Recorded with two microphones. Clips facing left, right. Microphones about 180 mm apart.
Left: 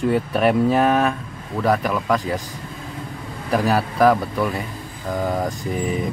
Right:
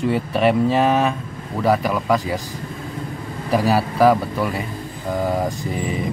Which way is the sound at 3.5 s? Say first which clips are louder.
Right 1 dB; 5° right (ahead or behind).